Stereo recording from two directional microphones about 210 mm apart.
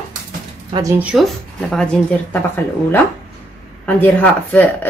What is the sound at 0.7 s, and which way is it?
Speech, 25° right (ahead or behind).